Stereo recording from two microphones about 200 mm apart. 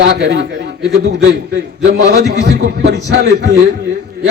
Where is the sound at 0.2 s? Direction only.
55° right (ahead or behind).